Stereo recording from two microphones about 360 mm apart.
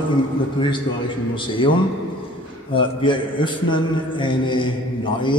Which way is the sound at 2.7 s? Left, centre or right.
Centre.